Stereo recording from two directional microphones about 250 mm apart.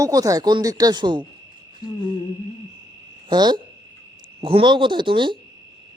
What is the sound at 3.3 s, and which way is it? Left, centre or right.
Speech, centre.